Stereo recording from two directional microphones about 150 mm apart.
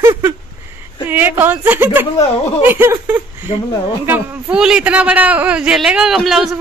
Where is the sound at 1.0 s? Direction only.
10° right (ahead or behind).